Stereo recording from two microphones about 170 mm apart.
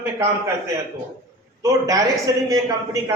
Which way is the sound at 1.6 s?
20° right (ahead or behind).